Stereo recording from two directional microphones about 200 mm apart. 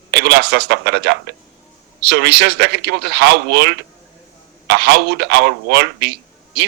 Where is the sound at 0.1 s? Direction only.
55° right (ahead or behind).